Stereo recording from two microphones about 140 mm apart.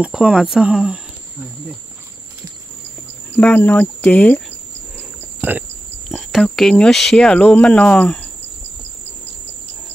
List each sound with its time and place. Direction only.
0.0 s speech: 5° right (ahead or behind)
3.3 s speech: 10° left (ahead or behind)
5.4 s speech: 15° right (ahead or behind)
6.0 s speech: centre (ahead or behind)